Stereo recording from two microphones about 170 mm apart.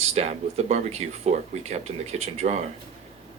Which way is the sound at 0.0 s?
40° right (ahead or behind).